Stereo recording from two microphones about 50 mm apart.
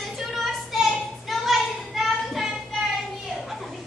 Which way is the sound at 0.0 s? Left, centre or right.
Centre.